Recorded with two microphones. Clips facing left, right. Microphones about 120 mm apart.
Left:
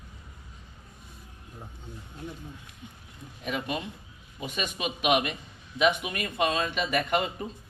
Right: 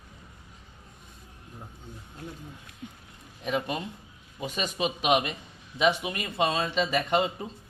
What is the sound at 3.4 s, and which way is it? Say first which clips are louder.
A man's voice: right 2 dB; 35° right (ahead or behind).